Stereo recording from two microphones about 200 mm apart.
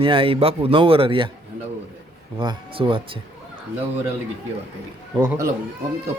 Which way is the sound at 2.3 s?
25° right (ahead or behind).